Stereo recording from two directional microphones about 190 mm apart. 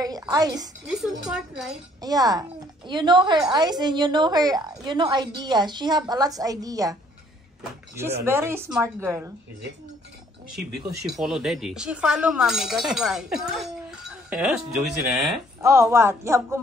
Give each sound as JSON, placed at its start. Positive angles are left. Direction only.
{"t": 0.0, "sound": "a woman's voice", "side_deg": -20}
{"t": 0.8, "sound": "speech", "side_deg": 0}
{"t": 2.0, "sound": "a woman's voice", "side_deg": -20}
{"t": 10.5, "sound": "speech", "side_deg": 0}
{"t": 15.6, "sound": "speech", "side_deg": -15}